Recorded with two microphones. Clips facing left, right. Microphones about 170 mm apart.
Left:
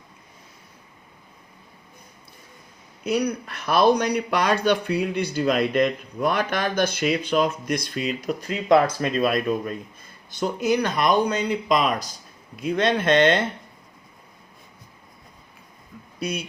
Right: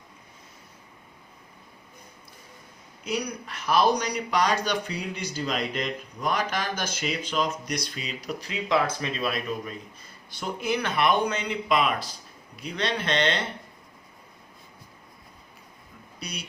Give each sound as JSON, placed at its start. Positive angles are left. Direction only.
{"t": 3.0, "sound": "speech", "side_deg": 60}
{"t": 16.2, "sound": "speech", "side_deg": 50}